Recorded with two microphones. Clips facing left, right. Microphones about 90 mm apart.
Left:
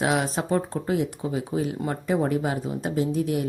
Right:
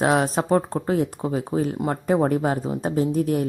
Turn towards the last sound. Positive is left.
turn(degrees=-40)  # may be behind; listen again after turning